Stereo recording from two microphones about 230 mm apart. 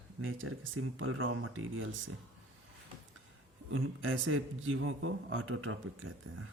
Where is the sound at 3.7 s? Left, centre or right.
Right.